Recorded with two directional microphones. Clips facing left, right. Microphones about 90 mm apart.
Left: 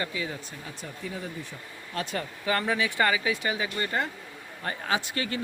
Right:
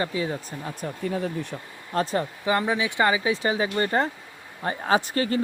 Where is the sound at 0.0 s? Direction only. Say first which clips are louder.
Right 6 dB; 30° right (ahead or behind); by 1.5 s 65° right (ahead or behind).